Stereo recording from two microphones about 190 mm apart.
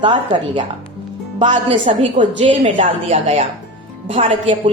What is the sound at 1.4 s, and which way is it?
A woman's voice, 35° right (ahead or behind).